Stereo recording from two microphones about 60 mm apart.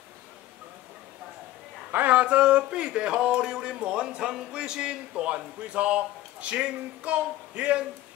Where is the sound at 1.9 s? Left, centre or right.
Right.